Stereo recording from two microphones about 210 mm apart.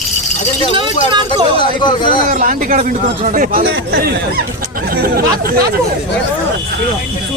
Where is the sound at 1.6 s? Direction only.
20° left (ahead or behind).